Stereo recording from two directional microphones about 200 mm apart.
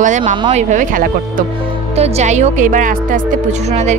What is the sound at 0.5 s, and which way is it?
Speech, 35° right (ahead or behind).